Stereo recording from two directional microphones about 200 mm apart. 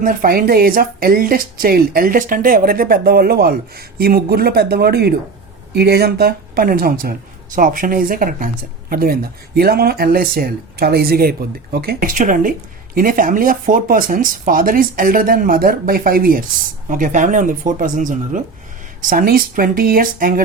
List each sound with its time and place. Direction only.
0.0 s speech: 45° right (ahead or behind)